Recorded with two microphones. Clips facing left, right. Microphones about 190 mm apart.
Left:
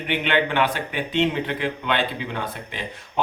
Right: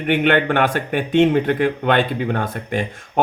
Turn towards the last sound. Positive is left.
turn(degrees=-50)  # may be behind; listen again after turning